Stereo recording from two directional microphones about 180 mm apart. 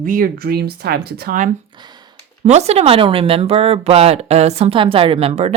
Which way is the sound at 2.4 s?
35° right (ahead or behind).